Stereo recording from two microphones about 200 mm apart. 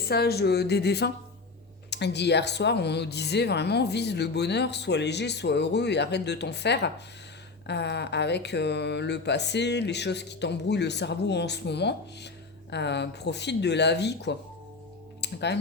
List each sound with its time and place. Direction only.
0.0 s speech: 50° left (ahead or behind)